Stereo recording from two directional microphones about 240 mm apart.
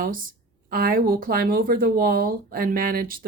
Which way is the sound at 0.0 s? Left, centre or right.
Right.